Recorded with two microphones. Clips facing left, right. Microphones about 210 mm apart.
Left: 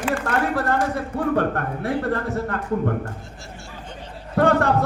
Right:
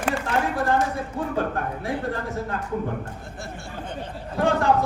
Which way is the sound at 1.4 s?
65° left (ahead or behind).